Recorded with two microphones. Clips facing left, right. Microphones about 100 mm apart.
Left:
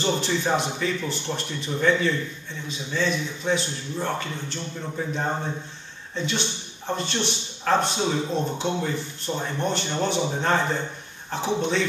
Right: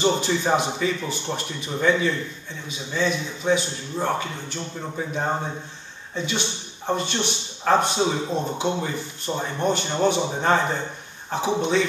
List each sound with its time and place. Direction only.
0.0 s speech: 10° right (ahead or behind)